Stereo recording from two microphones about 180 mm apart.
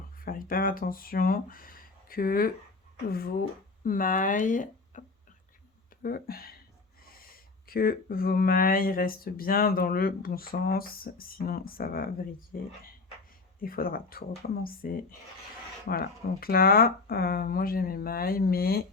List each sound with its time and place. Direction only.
0.2 s speech: 50° left (ahead or behind)
6.0 s speech: 55° left (ahead or behind)
13.6 s speech: 55° left (ahead or behind)